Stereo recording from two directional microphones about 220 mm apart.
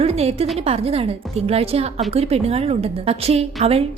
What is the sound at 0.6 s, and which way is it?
A woman's voice, 25° right (ahead or behind).